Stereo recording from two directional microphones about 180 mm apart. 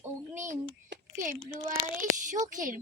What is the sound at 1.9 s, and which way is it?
Speech, 45° right (ahead or behind).